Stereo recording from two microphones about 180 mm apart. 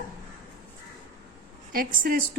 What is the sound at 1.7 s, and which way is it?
Speech, 55° right (ahead or behind).